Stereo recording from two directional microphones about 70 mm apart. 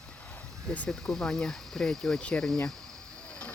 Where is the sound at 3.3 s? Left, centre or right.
Centre.